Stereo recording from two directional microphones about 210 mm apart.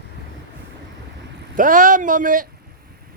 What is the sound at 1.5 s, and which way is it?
Speech, 40° right (ahead or behind).